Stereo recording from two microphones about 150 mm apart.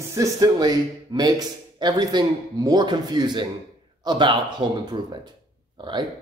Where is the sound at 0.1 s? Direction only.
25° right (ahead or behind).